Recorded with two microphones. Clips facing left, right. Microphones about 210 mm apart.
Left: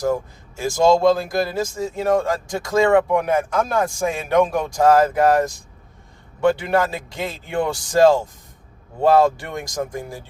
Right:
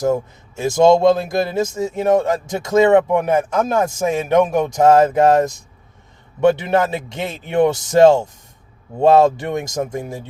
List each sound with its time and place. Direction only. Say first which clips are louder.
0.0 s speech: right 3 dB; 25° right (ahead or behind)